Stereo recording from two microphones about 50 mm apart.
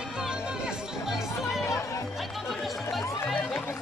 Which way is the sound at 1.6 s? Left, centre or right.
Left.